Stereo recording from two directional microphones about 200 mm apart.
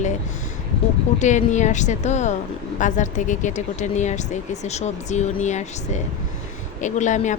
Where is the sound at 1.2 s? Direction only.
35° left (ahead or behind).